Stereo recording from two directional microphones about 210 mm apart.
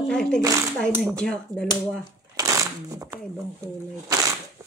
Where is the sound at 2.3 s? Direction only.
15° right (ahead or behind).